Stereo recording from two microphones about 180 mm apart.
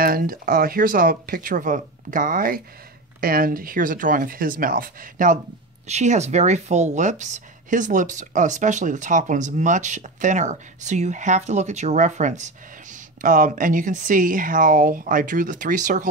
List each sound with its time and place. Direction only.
0.0 s speech: 55° right (ahead or behind)